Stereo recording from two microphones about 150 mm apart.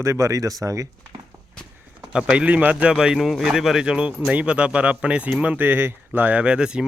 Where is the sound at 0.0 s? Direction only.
20° right (ahead or behind).